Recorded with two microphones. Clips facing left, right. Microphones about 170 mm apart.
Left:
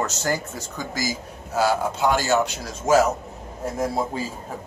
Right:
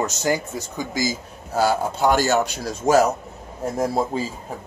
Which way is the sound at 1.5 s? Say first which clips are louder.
Right 1 dB; 40° right (ahead or behind).